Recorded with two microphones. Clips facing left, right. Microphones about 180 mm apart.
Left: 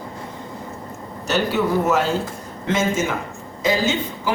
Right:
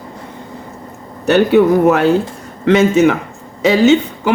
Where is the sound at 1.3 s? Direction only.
60° right (ahead or behind).